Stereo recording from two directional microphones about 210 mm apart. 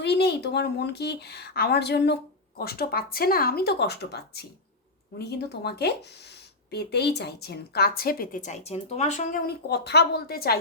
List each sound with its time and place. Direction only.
0.0 s a woman's voice: 50° left (ahead or behind); by 9.4 s 35° left (ahead or behind)
9.6 s a woman's voice: 50° left (ahead or behind)